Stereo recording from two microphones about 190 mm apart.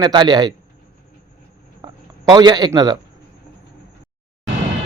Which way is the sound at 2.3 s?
20° right (ahead or behind).